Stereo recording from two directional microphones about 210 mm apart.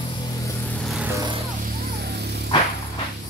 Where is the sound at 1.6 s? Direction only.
50° right (ahead or behind).